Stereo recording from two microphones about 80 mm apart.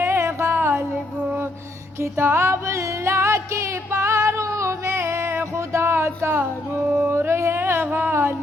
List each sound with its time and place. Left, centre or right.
0.0 s music: right
2.0 s music: right